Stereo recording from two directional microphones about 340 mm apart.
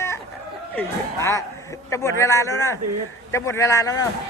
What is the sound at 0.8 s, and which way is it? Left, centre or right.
A man's voice, centre.